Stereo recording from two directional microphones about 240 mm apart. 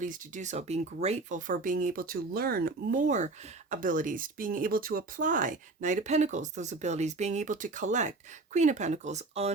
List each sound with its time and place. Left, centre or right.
0.0 s speech: right